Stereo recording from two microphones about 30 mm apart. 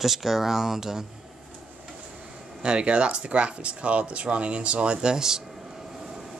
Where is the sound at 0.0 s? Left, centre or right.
Centre.